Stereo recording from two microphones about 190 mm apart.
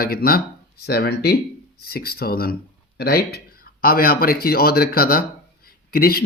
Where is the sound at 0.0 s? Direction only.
50° left (ahead or behind).